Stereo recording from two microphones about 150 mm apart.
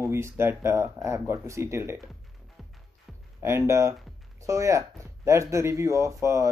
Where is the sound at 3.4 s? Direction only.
20° right (ahead or behind).